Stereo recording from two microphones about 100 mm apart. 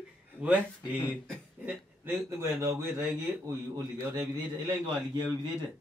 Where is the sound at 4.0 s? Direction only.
25° right (ahead or behind).